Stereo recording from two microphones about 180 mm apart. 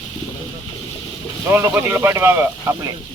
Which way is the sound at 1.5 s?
15° right (ahead or behind).